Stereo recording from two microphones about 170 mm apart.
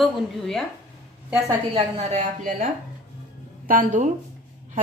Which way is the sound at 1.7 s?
40° right (ahead or behind).